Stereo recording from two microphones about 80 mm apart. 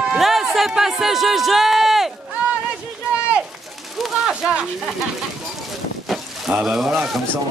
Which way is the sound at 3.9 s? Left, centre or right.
Centre.